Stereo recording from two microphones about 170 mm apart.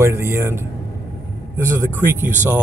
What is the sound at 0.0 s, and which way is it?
Speech, 15° right (ahead or behind).